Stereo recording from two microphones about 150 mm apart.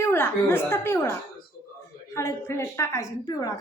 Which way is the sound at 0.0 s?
15° left (ahead or behind).